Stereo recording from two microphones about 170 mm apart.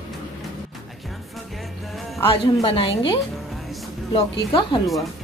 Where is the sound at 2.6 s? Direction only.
35° left (ahead or behind).